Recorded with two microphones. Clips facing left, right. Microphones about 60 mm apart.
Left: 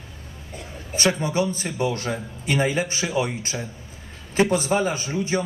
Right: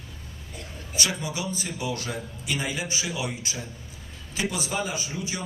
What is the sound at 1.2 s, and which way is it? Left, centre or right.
A man's voice, left.